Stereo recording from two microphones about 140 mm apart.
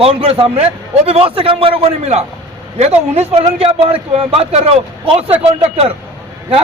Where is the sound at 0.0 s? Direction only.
45° right (ahead or behind).